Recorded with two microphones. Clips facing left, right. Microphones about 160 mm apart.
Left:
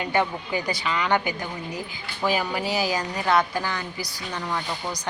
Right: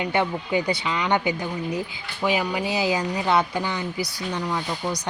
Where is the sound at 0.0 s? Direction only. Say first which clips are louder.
Right 1 dB; 20° right (ahead or behind).